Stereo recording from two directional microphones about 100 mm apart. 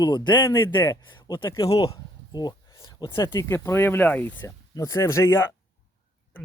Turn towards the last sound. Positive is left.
turn(degrees=25)  # may be behind; listen again after turning